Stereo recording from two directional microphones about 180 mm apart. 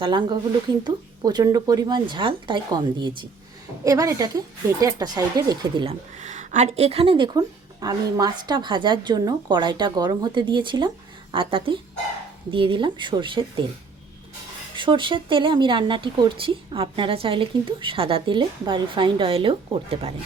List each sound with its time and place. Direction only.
0.0 s speech: 25° right (ahead or behind)
14.8 s speech: 25° right (ahead or behind)